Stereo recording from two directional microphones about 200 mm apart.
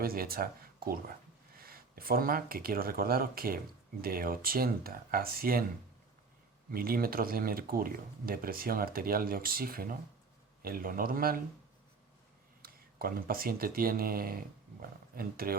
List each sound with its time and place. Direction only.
0.0 s speech: 50° right (ahead or behind)
1.5 s speech: 50° right (ahead or behind)
6.7 s speech: 50° right (ahead or behind)
12.6 s speech: 50° right (ahead or behind)